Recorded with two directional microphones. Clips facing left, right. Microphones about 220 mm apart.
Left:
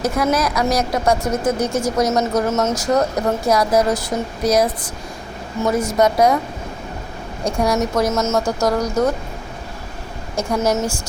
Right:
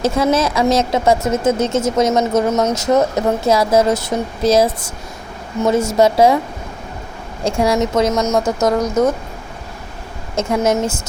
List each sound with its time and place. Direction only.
0.0 s speech: 25° right (ahead or behind)
7.4 s speech: 25° right (ahead or behind)
10.3 s speech: 20° right (ahead or behind)